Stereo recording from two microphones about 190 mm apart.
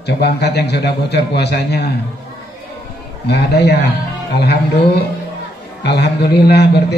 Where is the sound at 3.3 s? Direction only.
60° left (ahead or behind).